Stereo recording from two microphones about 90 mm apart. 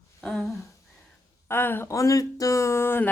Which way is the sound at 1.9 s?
40° left (ahead or behind).